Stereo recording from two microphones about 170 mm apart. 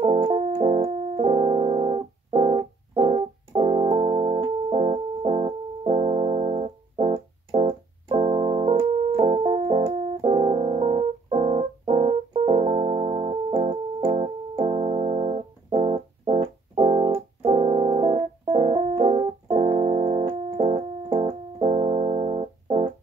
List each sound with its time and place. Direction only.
0.0 s keyboard: 35° right (ahead or behind)